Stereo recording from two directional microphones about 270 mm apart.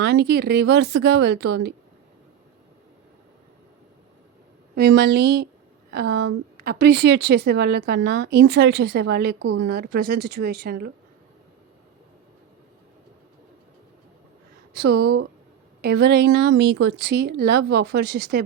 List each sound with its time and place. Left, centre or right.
0.0 s a woman's voice: right
4.7 s a woman's voice: right
14.7 s a woman's voice: right